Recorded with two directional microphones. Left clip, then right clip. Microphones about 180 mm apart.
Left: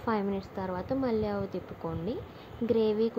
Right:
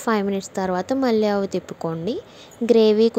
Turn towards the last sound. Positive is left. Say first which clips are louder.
# right 12 dB
turn(degrees=-45)  # may be behind; listen again after turning